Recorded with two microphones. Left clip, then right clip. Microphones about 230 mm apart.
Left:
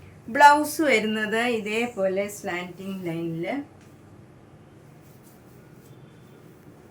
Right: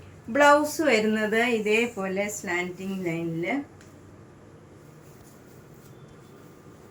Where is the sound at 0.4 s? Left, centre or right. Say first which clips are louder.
Left 3 dB; left; by 2.5 s centre.